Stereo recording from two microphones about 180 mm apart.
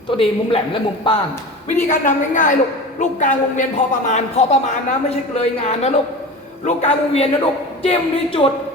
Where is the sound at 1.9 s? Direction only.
45° left (ahead or behind).